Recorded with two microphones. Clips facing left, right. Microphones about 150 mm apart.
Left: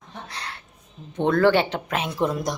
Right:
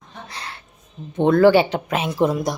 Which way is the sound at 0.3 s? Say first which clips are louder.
Right 2 dB; centre (ahead or behind).